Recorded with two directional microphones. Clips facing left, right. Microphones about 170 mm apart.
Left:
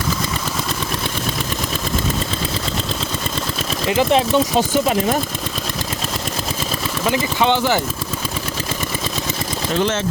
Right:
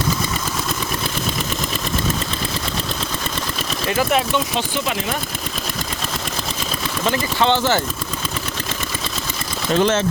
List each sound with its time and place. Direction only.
3.8 s speech: 20° left (ahead or behind)
4.3 s speech: 40° left (ahead or behind)
7.0 s speech: 10° left (ahead or behind)